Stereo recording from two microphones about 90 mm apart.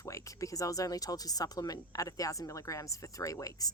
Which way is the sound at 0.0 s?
35° left (ahead or behind).